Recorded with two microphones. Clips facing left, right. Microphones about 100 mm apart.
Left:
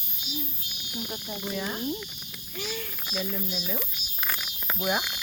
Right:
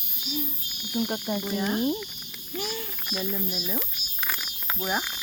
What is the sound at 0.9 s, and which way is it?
Speech, 60° right (ahead or behind).